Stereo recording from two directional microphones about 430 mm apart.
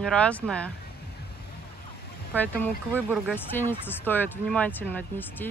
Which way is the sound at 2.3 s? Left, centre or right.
Centre.